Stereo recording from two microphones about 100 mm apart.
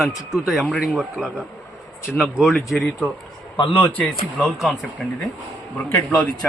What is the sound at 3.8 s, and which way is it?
Speech, 15° left (ahead or behind).